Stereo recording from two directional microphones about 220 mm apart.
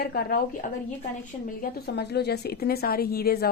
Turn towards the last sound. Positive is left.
turn(degrees=45)  # may be behind; listen again after turning